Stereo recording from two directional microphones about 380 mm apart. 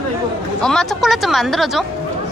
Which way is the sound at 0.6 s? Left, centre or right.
Centre.